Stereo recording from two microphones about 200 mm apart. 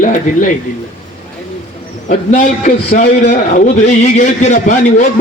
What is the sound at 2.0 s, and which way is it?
A man's voice, 40° left (ahead or behind).